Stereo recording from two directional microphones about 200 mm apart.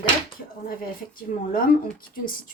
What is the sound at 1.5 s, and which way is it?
Speech, 45° left (ahead or behind).